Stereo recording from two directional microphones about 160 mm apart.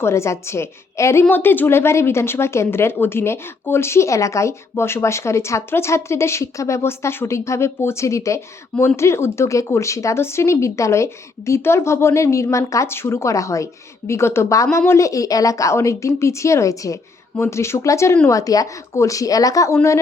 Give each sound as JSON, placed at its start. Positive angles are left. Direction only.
{"t": 0.0, "sound": "a woman's voice", "side_deg": 15}